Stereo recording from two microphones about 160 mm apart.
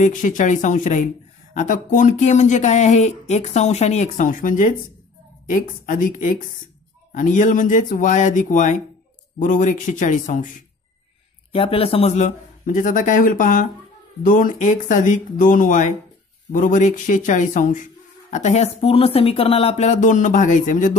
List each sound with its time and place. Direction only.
0.0 s speech: 50° left (ahead or behind)
11.5 s speech: 35° left (ahead or behind); by 20.9 s 50° left (ahead or behind)